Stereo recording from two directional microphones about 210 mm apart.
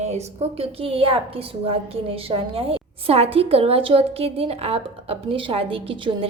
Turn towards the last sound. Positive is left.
turn(degrees=-25)  # may be behind; listen again after turning